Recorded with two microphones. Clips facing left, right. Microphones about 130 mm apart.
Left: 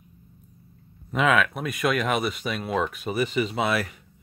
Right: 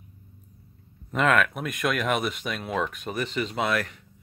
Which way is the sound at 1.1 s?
Centre (ahead or behind).